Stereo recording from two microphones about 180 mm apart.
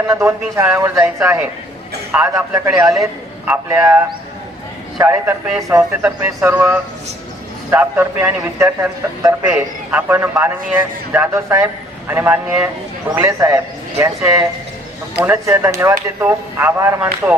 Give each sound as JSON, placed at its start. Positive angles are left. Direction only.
{"t": 0.1, "sound": "a man's voice", "side_deg": -15}